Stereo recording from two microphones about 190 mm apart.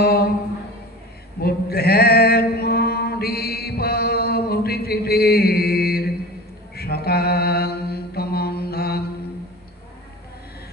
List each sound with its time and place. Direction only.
0.0 s a sound: 55° left (ahead or behind)
1.4 s male singing: 55° left (ahead or behind)
6.7 s mantra: 55° left (ahead or behind)